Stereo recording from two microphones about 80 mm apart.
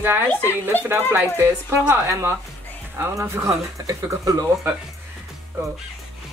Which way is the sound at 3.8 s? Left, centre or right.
Right.